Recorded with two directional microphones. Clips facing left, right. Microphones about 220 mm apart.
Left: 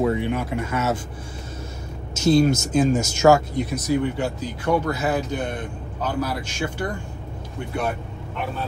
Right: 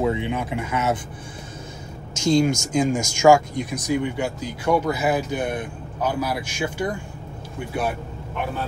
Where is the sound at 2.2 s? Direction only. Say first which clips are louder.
Left 2 dB; 15° right (ahead or behind).